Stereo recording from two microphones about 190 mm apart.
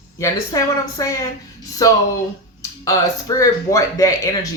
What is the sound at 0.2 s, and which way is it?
Speech, 15° left (ahead or behind).